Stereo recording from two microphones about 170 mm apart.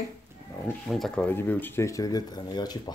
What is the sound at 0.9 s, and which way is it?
Speech, centre (ahead or behind).